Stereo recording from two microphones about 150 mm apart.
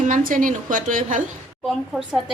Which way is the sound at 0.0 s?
65° right (ahead or behind).